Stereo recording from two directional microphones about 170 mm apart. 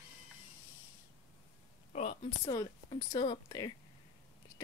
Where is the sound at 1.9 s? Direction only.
40° left (ahead or behind).